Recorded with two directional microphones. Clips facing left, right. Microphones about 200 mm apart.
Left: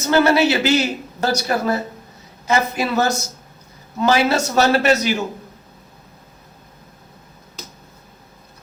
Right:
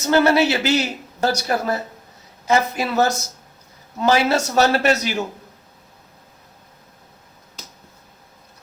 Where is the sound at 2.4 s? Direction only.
40° right (ahead or behind).